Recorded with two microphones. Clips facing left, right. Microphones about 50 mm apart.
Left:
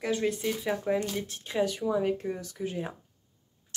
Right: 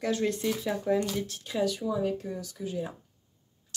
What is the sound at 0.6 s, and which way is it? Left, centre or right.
Speech, left.